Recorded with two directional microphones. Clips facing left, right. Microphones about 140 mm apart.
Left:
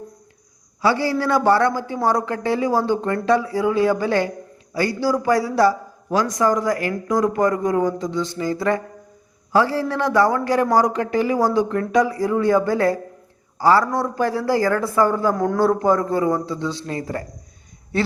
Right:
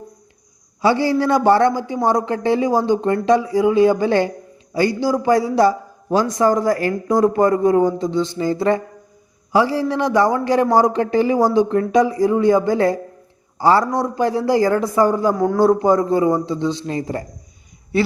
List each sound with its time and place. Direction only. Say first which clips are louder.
0.8 s a man's voice: right 3 dB; 20° right (ahead or behind)
9.5 s a man's voice: right 2 dB; 15° right (ahead or behind)